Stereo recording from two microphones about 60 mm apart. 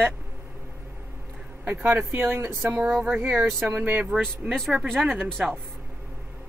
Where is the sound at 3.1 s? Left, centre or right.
Right.